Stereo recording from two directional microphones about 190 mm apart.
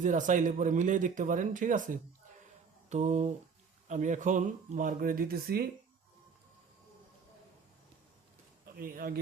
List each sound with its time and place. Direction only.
0.0 s speech: 40° right (ahead or behind)
2.9 s mantra: 35° right (ahead or behind)
3.8 s speech: 40° right (ahead or behind)
8.6 s speech: 50° right (ahead or behind)